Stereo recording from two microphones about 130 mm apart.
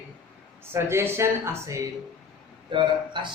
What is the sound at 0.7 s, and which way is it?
Speech, 20° right (ahead or behind).